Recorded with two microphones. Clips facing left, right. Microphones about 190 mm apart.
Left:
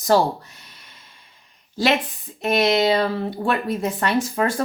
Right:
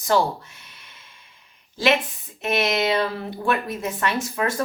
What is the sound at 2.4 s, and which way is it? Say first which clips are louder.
Speech: left 4 dB; 35° left (ahead or behind).